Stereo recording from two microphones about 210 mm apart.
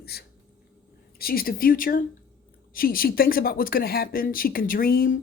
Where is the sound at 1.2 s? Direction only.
45° left (ahead or behind).